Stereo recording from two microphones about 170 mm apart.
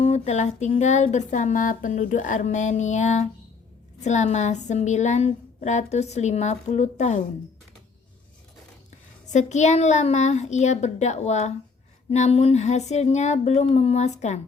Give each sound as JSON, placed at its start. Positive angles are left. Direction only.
{"t": 0.0, "sound": "child singing", "side_deg": 40}
{"t": 0.8, "sound": "a woman's voice", "side_deg": 45}
{"t": 9.2, "sound": "a woman's voice", "side_deg": 45}